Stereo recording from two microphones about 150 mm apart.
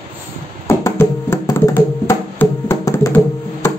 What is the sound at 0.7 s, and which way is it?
Music, 15° left (ahead or behind).